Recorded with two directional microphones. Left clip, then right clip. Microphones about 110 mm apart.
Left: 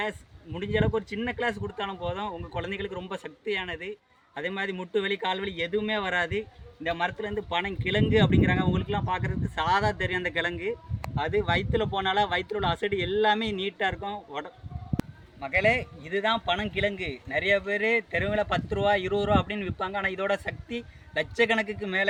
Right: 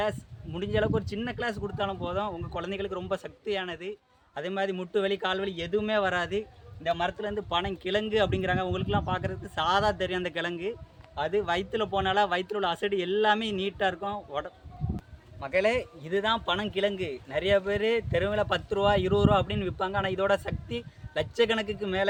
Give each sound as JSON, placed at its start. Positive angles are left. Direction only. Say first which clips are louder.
{"t": 0.0, "sound": "speech", "louder": "right 2 dB", "side_deg": -40}